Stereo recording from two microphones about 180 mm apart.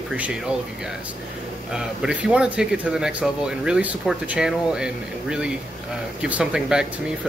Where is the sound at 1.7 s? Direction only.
5° right (ahead or behind).